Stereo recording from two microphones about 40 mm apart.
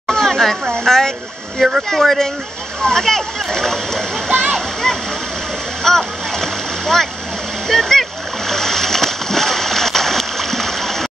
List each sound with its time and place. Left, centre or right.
0.1 s a sound: centre
1.9 s speech: centre
4.3 s waterfall: right
4.9 s waterfall: centre
5.9 s splash: centre